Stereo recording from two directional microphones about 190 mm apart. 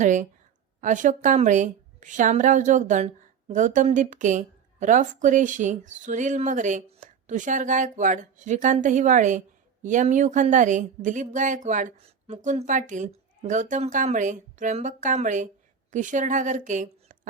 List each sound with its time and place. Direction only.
0.0 s a woman's voice: 40° right (ahead or behind)